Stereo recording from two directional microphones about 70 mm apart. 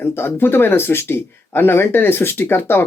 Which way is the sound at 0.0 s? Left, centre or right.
Left.